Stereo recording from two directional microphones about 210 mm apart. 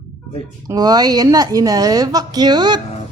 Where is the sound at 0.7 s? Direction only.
20° right (ahead or behind).